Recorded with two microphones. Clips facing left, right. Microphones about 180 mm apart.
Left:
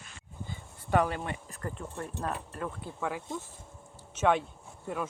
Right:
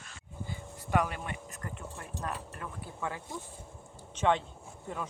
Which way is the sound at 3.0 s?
15° left (ahead or behind).